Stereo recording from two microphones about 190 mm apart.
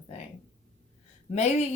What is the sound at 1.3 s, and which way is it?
Speech, 35° left (ahead or behind).